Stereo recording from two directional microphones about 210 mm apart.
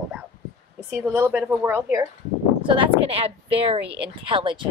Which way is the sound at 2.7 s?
25° right (ahead or behind).